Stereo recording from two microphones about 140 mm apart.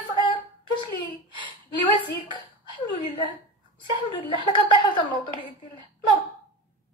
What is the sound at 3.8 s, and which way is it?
A woman's voice, 35° left (ahead or behind).